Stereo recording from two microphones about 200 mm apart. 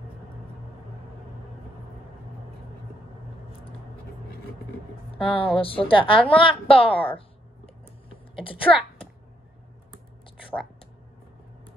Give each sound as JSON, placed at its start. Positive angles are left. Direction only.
{"t": 5.2, "sound": "a woman's voice", "side_deg": 25}